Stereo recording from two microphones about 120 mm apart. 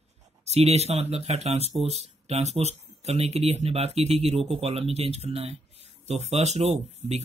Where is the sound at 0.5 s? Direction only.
60° right (ahead or behind).